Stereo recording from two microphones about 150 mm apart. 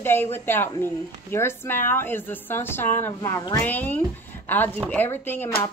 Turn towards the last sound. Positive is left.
turn(degrees=15)  # may be behind; listen again after turning